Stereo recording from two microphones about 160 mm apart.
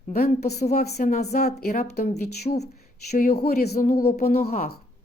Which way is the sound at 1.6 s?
70° left (ahead or behind).